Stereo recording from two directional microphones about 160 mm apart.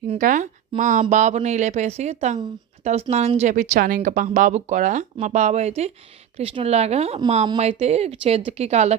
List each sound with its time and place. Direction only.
0.1 s speech: 50° right (ahead or behind)